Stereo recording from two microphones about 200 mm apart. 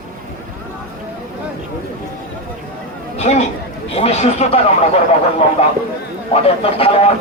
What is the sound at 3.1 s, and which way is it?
Speech, 35° left (ahead or behind).